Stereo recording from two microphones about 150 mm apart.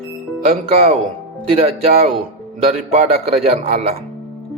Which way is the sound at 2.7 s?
45° right (ahead or behind).